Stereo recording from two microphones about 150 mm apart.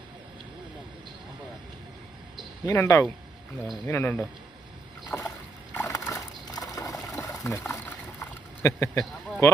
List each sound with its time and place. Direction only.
2.6 s speech: 20° left (ahead or behind)
5.1 s boat: 10° left (ahead or behind)
5.7 s a sound: 20° left (ahead or behind)